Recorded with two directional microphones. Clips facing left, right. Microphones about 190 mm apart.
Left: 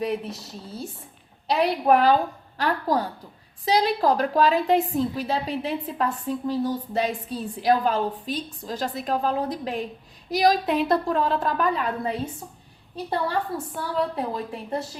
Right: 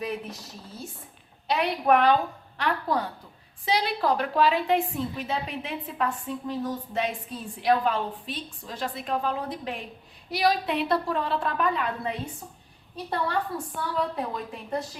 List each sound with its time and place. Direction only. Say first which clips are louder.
0.0 s a woman's voice: left 5 dB; 30° left (ahead or behind)
13.5 s speech: left 3 dB; 25° left (ahead or behind)